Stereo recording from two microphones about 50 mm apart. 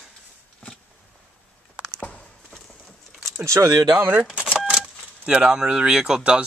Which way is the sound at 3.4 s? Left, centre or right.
Right.